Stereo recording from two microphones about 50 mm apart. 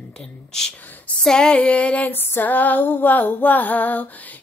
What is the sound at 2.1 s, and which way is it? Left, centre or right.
Mantra, left.